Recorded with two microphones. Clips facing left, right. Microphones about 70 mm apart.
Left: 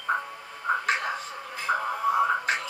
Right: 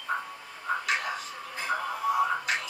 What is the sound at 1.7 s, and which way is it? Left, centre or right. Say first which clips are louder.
Music: left 4 dB; left.